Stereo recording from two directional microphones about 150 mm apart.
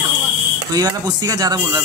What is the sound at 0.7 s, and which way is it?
Speech, 25° right (ahead or behind).